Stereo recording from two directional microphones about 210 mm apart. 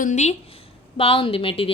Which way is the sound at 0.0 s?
35° left (ahead or behind).